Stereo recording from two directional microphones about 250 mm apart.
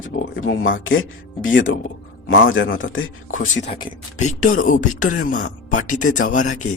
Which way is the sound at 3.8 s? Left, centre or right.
Left.